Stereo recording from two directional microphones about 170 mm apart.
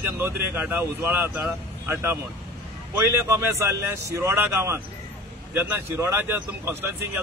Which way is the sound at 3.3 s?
15° right (ahead or behind).